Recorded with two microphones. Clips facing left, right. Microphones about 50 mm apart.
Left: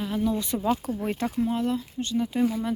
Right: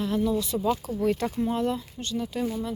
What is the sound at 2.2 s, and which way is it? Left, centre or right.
Speech, left.